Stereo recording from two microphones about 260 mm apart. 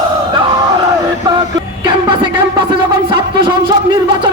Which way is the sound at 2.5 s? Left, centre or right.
Centre.